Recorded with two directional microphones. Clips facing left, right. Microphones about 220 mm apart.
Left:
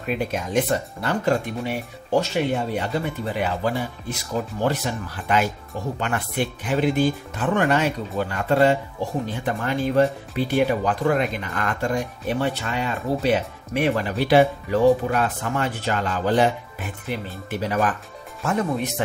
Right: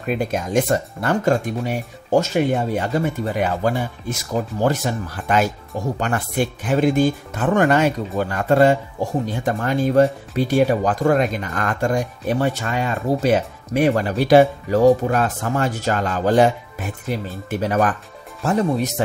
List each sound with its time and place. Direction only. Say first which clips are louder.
0.3 s speech: right 4 dB; 50° right (ahead or behind)
17.5 s speech: right 4 dB; 45° right (ahead or behind)
18.4 s speech: right 4 dB; 35° right (ahead or behind)